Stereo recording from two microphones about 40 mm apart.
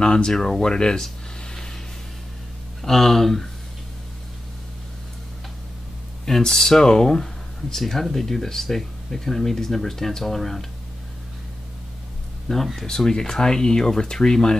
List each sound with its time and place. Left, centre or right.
0.0 s speech: left
1.0 s a sound: centre
2.8 s speech: centre
6.2 s speech: centre
7.7 s speech: centre
12.5 s speech: centre